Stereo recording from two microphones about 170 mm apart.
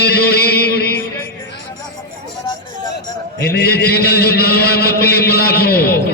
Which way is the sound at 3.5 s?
70° left (ahead or behind).